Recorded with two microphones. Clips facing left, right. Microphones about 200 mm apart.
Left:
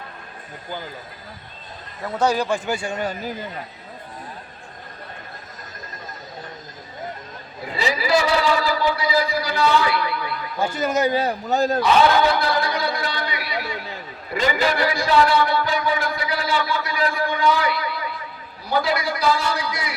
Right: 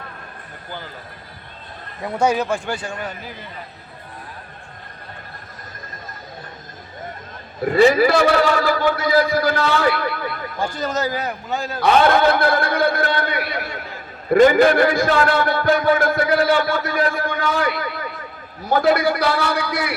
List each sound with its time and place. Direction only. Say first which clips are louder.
2.1 s speech: right 1 dB; 10° right (ahead or behind)
2.6 s a man's voice: left 2 dB; 10° left (ahead or behind)
7.6 s speech: right 12 dB; 55° right (ahead or behind)
10.8 s a man's voice: left 3 dB; 10° left (ahead or behind)
11.1 s a man's voice: left 4 dB; 30° left (ahead or behind)
11.8 s a sound: right 4 dB; 55° right (ahead or behind)
14.3 s a man's voice: right 10 dB; 50° right (ahead or behind)